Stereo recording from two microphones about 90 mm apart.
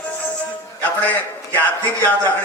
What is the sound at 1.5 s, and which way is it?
Speech, 20° left (ahead or behind).